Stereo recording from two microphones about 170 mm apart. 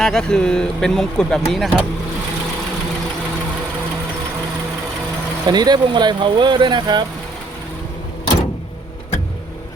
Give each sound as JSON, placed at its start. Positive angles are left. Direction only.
{"t": 0.0, "sound": "speech", "side_deg": 5}
{"t": 5.5, "sound": "speech", "side_deg": -25}